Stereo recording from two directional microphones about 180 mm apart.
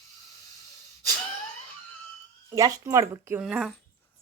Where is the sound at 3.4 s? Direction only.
Centre (ahead or behind).